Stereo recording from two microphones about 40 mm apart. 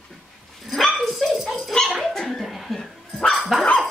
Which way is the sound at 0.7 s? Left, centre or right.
Centre.